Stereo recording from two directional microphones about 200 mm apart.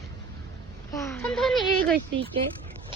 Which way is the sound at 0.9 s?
15° left (ahead or behind).